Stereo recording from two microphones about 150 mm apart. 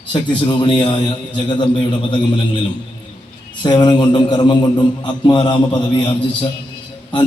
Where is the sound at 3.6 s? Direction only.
30° left (ahead or behind).